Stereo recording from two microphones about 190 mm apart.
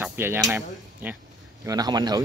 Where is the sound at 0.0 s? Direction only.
10° right (ahead or behind).